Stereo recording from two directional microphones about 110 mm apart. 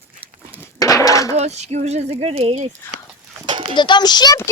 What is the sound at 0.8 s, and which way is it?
Breaking, 30° left (ahead or behind).